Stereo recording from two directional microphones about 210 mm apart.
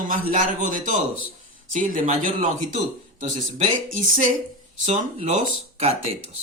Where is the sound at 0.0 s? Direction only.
40° right (ahead or behind).